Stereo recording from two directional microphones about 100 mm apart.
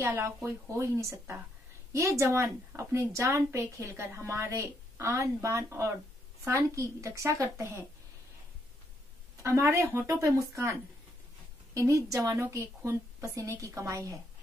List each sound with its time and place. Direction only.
0.0 s a woman's voice: 25° right (ahead or behind)
9.4 s a woman's voice: 30° right (ahead or behind)